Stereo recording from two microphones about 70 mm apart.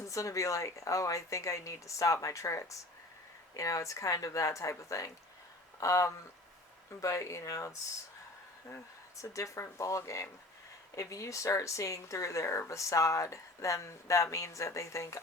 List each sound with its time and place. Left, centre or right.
0.0 s a woman's voice: left
9.3 s a woman's voice: left